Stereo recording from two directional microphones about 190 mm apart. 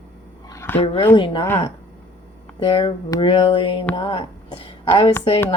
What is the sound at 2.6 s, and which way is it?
Speech, 25° left (ahead or behind).